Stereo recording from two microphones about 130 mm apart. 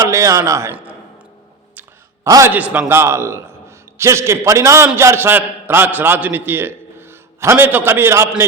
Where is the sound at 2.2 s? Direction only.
25° right (ahead or behind).